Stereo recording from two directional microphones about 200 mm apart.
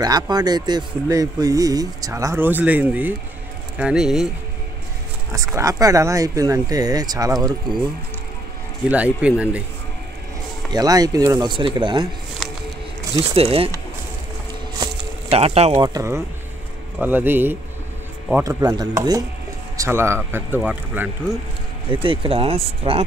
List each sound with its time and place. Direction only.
0.0 s speech: 20° right (ahead or behind); by 4.3 s centre (ahead or behind)
5.3 s speech: 15° right (ahead or behind)
8.9 s speech: 5° right (ahead or behind)
10.7 s speech: 20° right (ahead or behind)
13.3 s speech: 30° right (ahead or behind)
14.8 s a sound: 30° right (ahead or behind)
17.0 s speech: 10° right (ahead or behind)
21.9 s speech: 25° right (ahead or behind)